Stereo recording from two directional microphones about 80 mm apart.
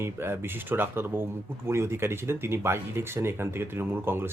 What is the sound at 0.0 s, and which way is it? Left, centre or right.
Speech, right.